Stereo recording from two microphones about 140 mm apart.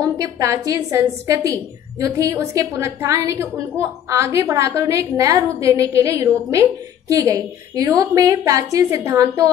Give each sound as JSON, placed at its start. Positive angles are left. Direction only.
{"t": 0.0, "sound": "a woman's voice", "side_deg": -25}